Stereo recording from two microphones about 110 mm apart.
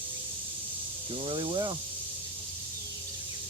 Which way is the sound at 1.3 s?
45° right (ahead or behind).